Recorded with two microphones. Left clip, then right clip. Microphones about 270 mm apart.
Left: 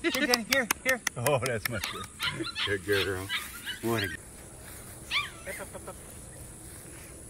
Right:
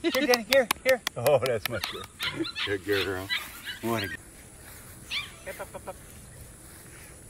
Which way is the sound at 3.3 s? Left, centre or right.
Left.